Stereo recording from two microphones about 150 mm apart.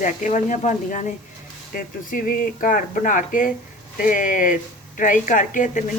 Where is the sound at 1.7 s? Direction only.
70° left (ahead or behind).